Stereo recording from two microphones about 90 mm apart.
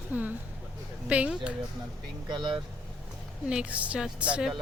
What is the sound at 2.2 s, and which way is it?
Speech, 55° right (ahead or behind).